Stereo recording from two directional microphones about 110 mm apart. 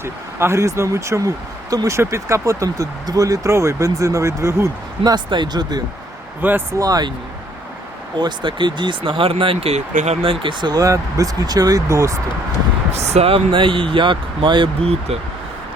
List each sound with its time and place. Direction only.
0.0 s speech: 25° right (ahead or behind)
5.1 s speech: 40° right (ahead or behind)
6.4 s speech: 15° right (ahead or behind)
6.7 s speech: 35° right (ahead or behind)
8.2 s speech: 45° right (ahead or behind); by 10.3 s 90° right
10.4 s speech: 40° right (ahead or behind)
12.9 s speech: 80° right; by 14.7 s 45° right (ahead or behind)
14.8 s speech: 65° right (ahead or behind)